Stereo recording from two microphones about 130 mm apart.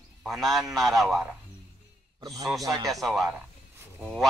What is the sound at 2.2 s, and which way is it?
Speech, 30° right (ahead or behind).